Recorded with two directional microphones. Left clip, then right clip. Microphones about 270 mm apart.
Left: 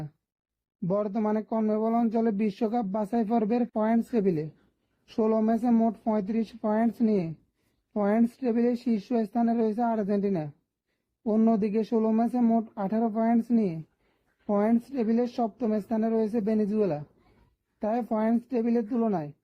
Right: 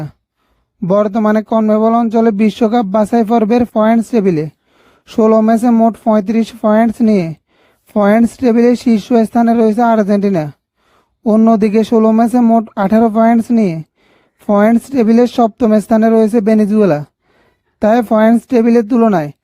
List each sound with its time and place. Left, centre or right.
0.9 s speech: right